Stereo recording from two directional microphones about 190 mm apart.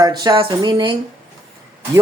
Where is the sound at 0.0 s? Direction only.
20° right (ahead or behind).